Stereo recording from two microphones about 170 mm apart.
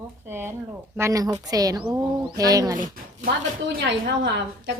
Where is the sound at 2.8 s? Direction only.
50° right (ahead or behind).